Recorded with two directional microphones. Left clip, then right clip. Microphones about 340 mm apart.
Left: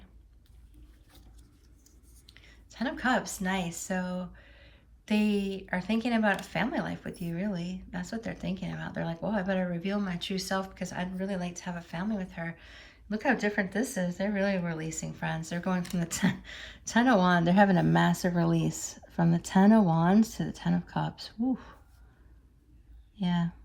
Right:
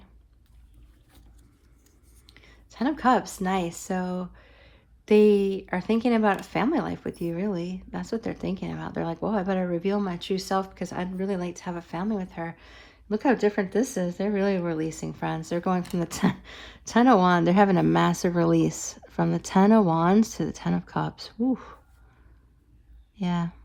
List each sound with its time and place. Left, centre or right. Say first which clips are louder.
2.2 s speech: right 2 dB; centre
23.2 s speech: right 3 dB; centre